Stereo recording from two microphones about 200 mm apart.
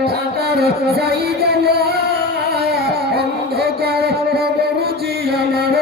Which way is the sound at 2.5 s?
50° right (ahead or behind).